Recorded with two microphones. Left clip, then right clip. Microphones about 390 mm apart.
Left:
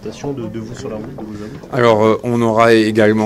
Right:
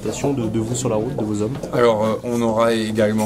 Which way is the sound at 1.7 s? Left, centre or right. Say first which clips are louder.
Left 5 dB; left.